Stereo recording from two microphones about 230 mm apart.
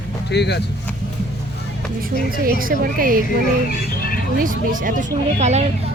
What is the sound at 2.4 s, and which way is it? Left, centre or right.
Speech, right.